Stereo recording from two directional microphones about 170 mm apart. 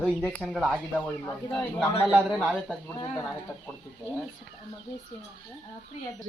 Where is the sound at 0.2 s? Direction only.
Centre (ahead or behind).